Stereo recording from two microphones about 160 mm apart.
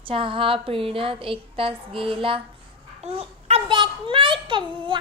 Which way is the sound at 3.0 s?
40° right (ahead or behind).